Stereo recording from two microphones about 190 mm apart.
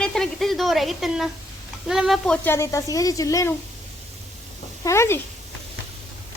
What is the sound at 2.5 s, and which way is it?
A woman's voice, 15° left (ahead or behind).